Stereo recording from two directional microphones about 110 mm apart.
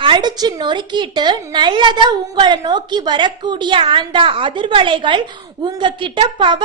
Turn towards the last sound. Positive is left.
turn(degrees=-45)  # may be behind; listen again after turning